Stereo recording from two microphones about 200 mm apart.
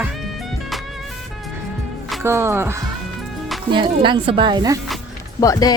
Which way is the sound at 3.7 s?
25° right (ahead or behind).